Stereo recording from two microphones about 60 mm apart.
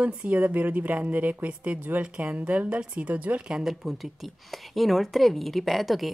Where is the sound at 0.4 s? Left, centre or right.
Right.